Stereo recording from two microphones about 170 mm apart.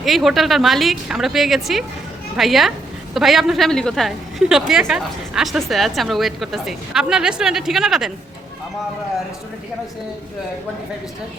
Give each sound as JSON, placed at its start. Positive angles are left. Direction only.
{"t": 0.0, "sound": "a woman's voice", "side_deg": 0}